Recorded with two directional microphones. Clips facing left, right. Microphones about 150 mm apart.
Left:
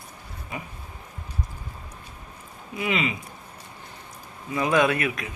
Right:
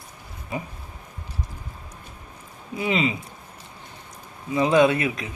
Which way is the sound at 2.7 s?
30° right (ahead or behind).